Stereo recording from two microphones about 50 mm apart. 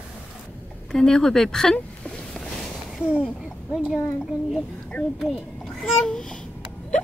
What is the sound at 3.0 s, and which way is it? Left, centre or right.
Speech, right.